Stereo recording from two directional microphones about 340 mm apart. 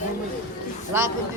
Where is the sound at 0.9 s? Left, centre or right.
Centre.